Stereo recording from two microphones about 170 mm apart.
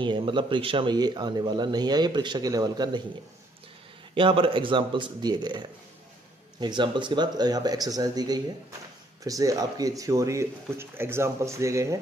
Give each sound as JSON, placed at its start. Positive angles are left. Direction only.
{"t": 0.0, "sound": "speech", "side_deg": -30}
{"t": 4.1, "sound": "speech", "side_deg": -30}
{"t": 6.6, "sound": "speech", "side_deg": -25}